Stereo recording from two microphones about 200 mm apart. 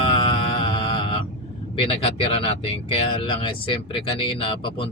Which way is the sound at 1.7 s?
30° left (ahead or behind).